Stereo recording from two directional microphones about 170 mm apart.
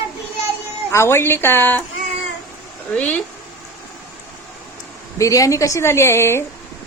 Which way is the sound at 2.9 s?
5° left (ahead or behind).